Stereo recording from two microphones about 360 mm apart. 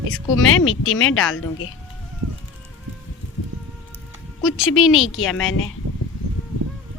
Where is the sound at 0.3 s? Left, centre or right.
Left.